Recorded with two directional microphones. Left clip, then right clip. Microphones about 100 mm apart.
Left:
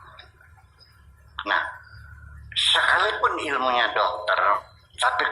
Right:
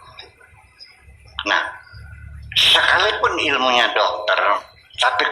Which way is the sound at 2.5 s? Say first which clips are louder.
Right 6 dB; 25° right (ahead or behind).